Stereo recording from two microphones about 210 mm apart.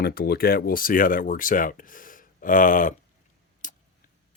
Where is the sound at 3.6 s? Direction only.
40° left (ahead or behind).